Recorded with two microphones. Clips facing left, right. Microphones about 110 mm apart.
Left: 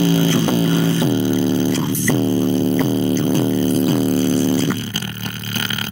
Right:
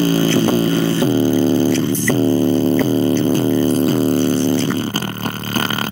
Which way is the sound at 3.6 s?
35° right (ahead or behind).